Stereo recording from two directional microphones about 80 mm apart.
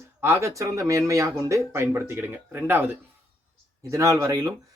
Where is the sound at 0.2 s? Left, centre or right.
Right.